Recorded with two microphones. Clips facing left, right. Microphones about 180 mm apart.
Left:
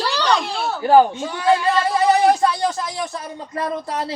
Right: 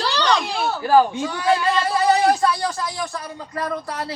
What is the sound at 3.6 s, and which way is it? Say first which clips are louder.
Speech: left 2 dB; 20° left (ahead or behind).